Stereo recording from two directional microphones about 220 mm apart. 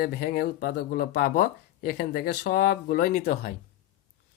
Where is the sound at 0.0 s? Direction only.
40° left (ahead or behind).